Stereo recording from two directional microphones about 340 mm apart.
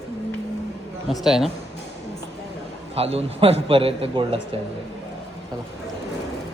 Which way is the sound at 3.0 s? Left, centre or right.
Centre.